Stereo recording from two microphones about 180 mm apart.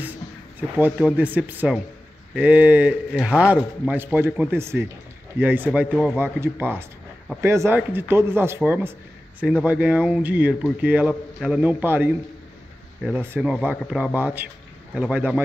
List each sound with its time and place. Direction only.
0.6 s speech: 10° right (ahead or behind)